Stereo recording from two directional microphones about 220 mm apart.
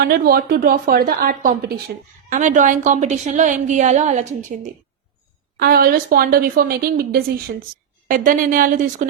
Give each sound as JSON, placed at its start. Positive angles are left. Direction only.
{"t": 0.0, "sound": "a woman's voice", "side_deg": -45}
{"t": 5.5, "sound": "a woman's voice", "side_deg": -40}